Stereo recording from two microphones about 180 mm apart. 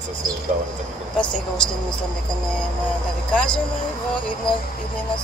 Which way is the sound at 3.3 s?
5° left (ahead or behind).